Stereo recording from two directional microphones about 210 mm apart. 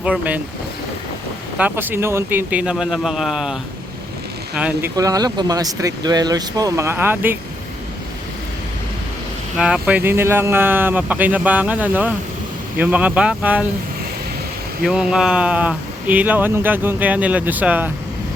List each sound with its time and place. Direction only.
0.0 s speech: 5° right (ahead or behind)
1.5 s speech: 10° right (ahead or behind)
4.9 s speech: 15° right (ahead or behind)
9.6 s speech: 5° right (ahead or behind)
14.8 s speech: centre (ahead or behind)